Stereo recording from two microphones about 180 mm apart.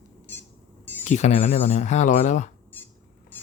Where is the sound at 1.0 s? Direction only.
40° left (ahead or behind).